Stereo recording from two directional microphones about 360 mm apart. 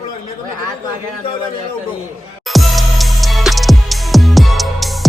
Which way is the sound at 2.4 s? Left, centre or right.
Centre.